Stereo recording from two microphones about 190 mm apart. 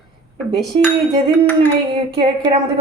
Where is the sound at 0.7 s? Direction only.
30° right (ahead or behind).